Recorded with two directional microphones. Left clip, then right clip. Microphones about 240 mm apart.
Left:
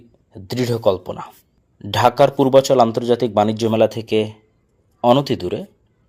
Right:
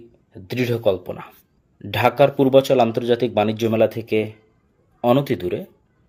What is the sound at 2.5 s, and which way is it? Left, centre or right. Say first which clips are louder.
Speech: left 2 dB; centre.